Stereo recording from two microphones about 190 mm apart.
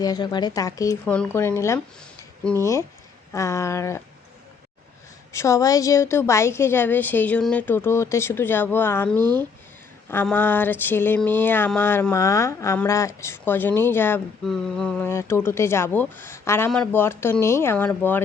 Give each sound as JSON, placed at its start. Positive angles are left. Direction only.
{"t": 0.0, "sound": "speech", "side_deg": 20}
{"t": 1.0, "sound": "a woman's voice", "side_deg": 5}
{"t": 3.3, "sound": "a woman's voice", "side_deg": 15}
{"t": 5.3, "sound": "a woman's voice", "side_deg": 15}
{"t": 10.2, "sound": "a woman's voice", "side_deg": 10}